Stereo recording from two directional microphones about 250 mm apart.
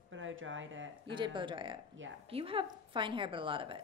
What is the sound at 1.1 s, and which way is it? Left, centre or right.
A woman's voice, centre.